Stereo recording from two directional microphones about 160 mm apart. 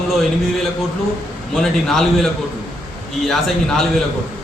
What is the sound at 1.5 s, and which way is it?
A man's voice, centre (ahead or behind).